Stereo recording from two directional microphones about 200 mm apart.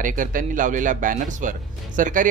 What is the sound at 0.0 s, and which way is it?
Speech, 40° right (ahead or behind).